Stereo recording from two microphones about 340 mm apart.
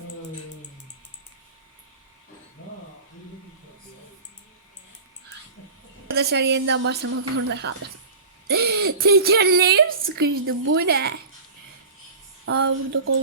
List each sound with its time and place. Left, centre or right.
6.1 s a woman's voice: right
7.0 s speech: right
8.4 s a sound: right
9.0 s a woman's voice: right
10.8 s a woman's voice: right
12.5 s speech: right